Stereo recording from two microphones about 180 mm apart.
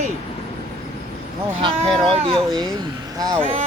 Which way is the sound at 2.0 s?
35° right (ahead or behind).